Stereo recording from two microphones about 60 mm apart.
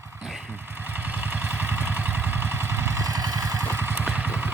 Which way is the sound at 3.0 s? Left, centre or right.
Right.